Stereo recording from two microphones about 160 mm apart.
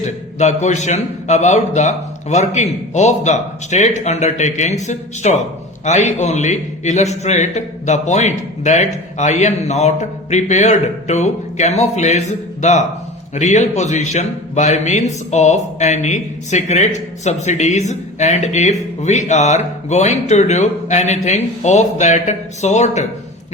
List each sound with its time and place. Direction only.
0.0 s speech: 45° left (ahead or behind)